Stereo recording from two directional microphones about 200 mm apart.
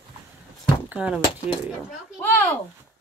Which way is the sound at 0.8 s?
5° right (ahead or behind).